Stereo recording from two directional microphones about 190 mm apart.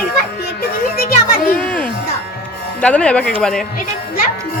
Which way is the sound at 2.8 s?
5° left (ahead or behind).